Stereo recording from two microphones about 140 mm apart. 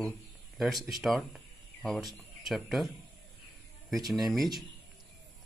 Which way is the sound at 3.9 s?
Centre (ahead or behind).